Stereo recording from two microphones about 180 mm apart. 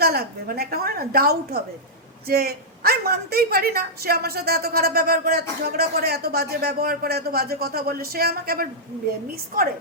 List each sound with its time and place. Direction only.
0.0 s a woman's voice: 60° right (ahead or behind)